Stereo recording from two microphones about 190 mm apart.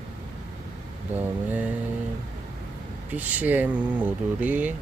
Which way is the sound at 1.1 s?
10° right (ahead or behind).